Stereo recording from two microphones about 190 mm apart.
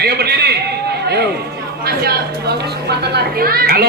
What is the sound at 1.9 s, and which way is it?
Speech, 55° right (ahead or behind).